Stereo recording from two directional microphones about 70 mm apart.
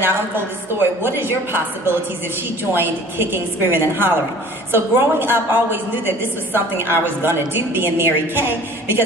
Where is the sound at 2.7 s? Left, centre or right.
Right.